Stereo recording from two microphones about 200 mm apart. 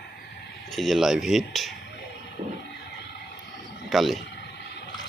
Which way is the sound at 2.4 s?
35° right (ahead or behind).